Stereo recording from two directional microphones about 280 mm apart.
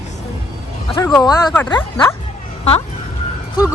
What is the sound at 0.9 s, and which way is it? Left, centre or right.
Speech, centre.